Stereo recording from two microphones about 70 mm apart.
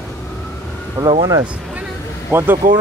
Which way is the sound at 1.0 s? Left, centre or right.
Right.